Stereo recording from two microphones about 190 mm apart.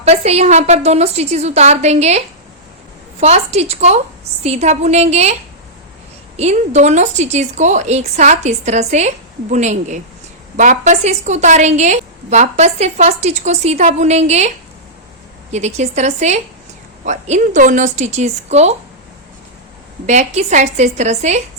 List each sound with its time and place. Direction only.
0.0 s a woman's voice: 35° right (ahead or behind)
15.5 s a woman's voice: 35° right (ahead or behind)
20.1 s a woman's voice: 40° right (ahead or behind)